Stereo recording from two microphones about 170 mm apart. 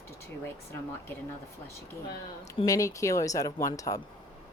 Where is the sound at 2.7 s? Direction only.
20° left (ahead or behind).